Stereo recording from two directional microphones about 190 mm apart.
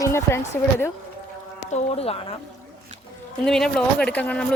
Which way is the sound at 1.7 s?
35° left (ahead or behind).